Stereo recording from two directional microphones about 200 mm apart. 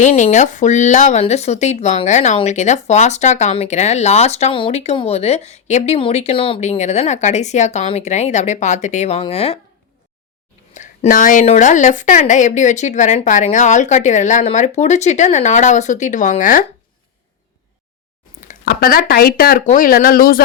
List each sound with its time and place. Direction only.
0.0 s speech: 35° left (ahead or behind)
10.8 s speech: 40° left (ahead or behind)
18.6 s speech: 50° left (ahead or behind)